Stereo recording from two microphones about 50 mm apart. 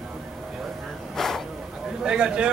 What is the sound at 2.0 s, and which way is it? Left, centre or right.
Speech, centre.